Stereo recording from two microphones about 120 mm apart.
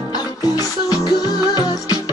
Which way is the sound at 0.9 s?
35° left (ahead or behind).